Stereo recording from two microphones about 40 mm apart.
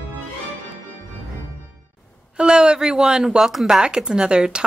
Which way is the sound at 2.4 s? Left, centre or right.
Right.